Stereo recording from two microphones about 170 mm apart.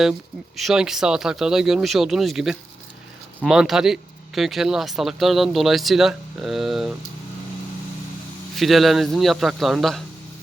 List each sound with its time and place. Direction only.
0.0 s speech: centre (ahead or behind)
8.5 s speech: centre (ahead or behind)